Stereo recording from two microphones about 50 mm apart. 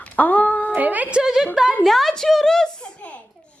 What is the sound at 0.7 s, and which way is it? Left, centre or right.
Speech, right.